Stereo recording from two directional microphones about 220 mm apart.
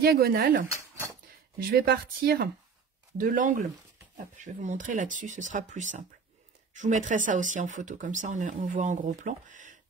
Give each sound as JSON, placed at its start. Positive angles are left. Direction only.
{"t": 0.0, "sound": "speech", "side_deg": -45}
{"t": 1.7, "sound": "speech", "side_deg": -45}